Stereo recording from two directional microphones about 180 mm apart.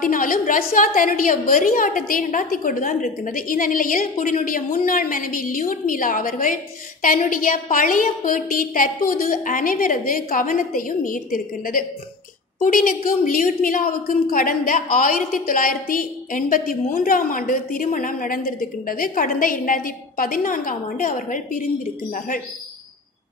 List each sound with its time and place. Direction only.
0.0 s a woman's voice: 50° left (ahead or behind)